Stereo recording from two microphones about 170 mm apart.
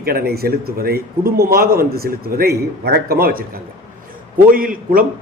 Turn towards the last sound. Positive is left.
turn(degrees=-55)  # may be behind; listen again after turning